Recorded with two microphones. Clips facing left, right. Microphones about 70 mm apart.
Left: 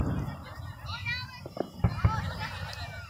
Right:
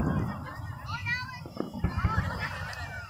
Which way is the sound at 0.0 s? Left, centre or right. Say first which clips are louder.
Right 4 dB; right.